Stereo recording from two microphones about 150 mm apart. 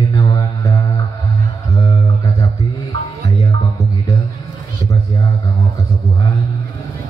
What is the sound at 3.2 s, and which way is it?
Music, 20° left (ahead or behind).